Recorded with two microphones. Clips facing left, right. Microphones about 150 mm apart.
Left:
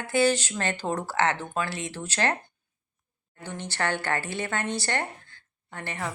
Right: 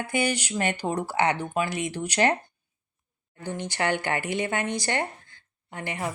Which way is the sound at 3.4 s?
15° right (ahead or behind).